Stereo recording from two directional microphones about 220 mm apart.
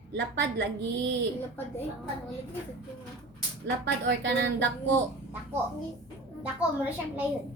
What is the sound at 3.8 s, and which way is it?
Speech, 50° right (ahead or behind).